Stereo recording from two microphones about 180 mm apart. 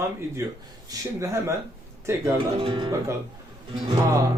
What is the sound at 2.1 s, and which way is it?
Speech, 15° right (ahead or behind).